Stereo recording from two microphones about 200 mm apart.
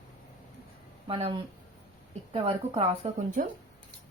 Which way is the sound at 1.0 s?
30° right (ahead or behind).